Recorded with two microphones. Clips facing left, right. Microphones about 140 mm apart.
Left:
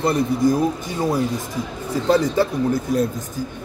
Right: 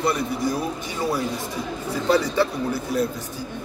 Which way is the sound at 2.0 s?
45° left (ahead or behind).